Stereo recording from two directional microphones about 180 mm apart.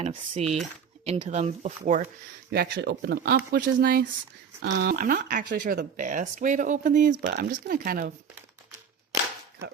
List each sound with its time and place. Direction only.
0.0 s speech: 35° right (ahead or behind)
2.5 s speech: 65° right (ahead or behind)